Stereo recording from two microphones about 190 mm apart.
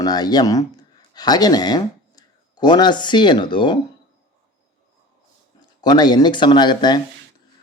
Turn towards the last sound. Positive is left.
turn(degrees=20)  # may be behind; listen again after turning